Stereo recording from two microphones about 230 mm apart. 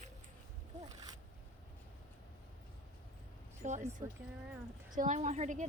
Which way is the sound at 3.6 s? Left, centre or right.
Right.